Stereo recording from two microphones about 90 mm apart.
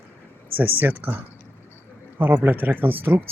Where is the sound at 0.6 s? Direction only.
20° right (ahead or behind).